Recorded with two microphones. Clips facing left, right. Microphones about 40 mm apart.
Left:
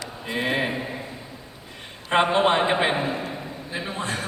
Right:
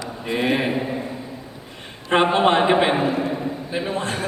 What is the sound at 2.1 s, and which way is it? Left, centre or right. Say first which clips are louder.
A man's voice: right 3 dB; right.